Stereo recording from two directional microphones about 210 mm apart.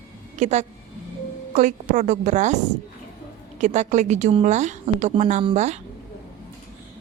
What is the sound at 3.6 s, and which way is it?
A woman's voice, 35° right (ahead or behind).